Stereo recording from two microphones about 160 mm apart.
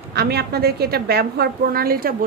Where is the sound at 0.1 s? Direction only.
80° right.